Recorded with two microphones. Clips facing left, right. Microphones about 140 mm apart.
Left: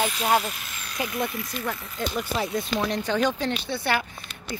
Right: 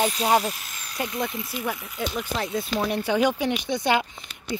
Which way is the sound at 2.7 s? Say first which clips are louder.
Right 2 dB; 10° right (ahead or behind).